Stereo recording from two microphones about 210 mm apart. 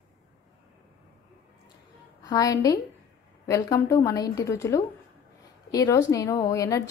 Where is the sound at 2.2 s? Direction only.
20° left (ahead or behind).